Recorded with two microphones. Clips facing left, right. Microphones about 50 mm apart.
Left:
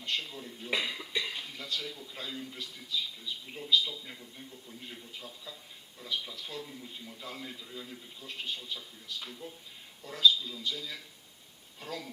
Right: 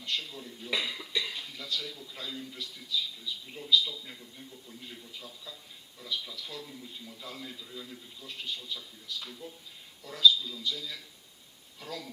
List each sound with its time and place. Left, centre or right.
0.0 s a man's voice: centre
4.0 s a man's voice: centre
4.8 s a man's voice: centre